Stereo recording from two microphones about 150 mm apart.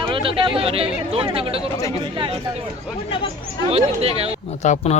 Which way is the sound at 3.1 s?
35° left (ahead or behind).